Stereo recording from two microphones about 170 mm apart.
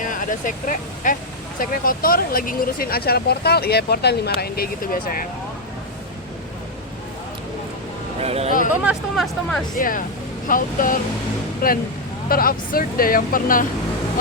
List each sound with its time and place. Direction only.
0.0 s speech: 50° left (ahead or behind)
8.2 s speech: 35° right (ahead or behind)
8.7 s speech: 5° right (ahead or behind)
9.7 s speech: 50° left (ahead or behind)